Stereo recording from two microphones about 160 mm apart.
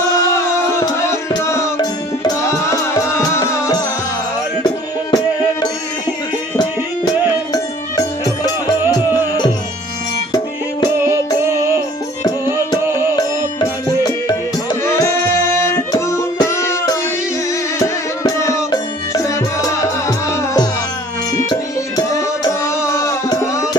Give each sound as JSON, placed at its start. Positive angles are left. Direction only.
{"t": 0.3, "sound": "music", "side_deg": 15}
{"t": 5.1, "sound": "music", "side_deg": 25}
{"t": 7.5, "sound": "music", "side_deg": 25}
{"t": 10.9, "sound": "music", "side_deg": -15}
{"t": 13.1, "sound": "music", "side_deg": 25}